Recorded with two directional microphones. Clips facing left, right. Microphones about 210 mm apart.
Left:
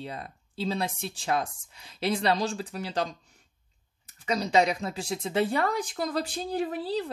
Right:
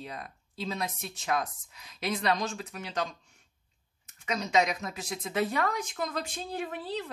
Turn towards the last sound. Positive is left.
turn(degrees=35)  # may be behind; listen again after turning